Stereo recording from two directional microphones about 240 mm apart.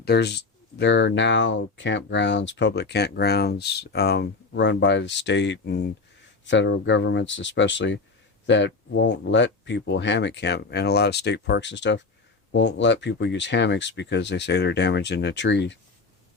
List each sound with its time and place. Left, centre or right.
0.0 s speech: left